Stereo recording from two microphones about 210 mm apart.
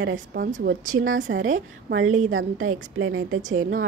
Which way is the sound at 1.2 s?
65° right (ahead or behind).